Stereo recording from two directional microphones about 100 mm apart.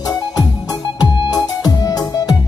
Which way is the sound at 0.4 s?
45° left (ahead or behind).